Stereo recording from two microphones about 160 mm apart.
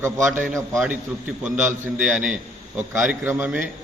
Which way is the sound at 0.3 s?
15° right (ahead or behind).